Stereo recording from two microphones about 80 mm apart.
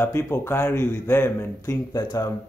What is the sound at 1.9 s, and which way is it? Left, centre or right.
Speech, left.